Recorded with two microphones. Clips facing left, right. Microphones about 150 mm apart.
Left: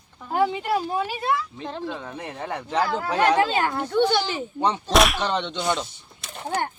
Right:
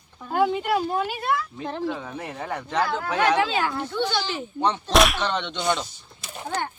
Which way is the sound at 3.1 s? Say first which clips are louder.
Left 2 dB; 35° left (ahead or behind).